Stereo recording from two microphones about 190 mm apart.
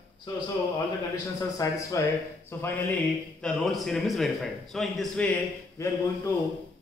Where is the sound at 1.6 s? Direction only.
15° left (ahead or behind).